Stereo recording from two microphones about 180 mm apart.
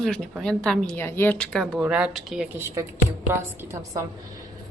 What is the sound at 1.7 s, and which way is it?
Speech, 10° right (ahead or behind).